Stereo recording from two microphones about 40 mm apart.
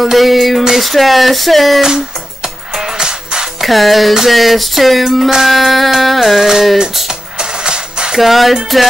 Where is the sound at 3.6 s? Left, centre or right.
Centre.